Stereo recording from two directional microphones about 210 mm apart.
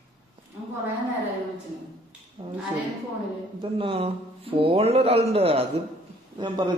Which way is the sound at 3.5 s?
25° right (ahead or behind).